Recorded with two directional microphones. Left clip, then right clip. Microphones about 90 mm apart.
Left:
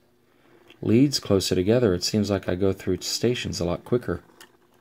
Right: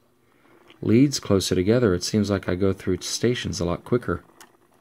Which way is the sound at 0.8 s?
20° right (ahead or behind).